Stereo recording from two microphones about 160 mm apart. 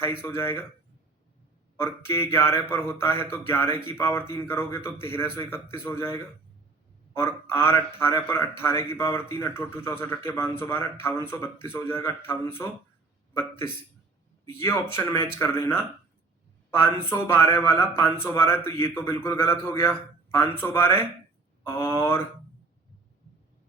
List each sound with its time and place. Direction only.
0.0 s a man's voice: 15° left (ahead or behind)
1.7 s a man's voice: 15° left (ahead or behind)
14.4 s a man's voice: 15° left (ahead or behind)